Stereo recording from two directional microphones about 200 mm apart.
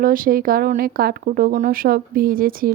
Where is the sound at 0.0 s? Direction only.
45° right (ahead or behind).